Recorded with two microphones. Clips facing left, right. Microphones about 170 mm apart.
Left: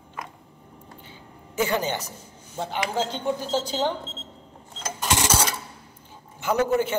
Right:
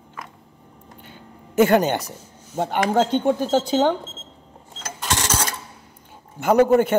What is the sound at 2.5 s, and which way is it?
Speech, 50° right (ahead or behind).